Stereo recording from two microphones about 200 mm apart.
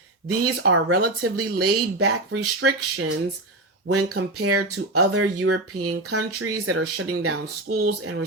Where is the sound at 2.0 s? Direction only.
90° right.